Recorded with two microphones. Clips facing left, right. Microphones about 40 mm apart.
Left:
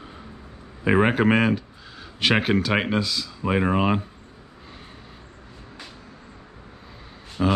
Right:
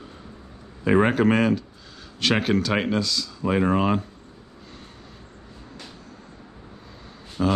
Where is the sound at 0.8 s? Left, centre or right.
Centre.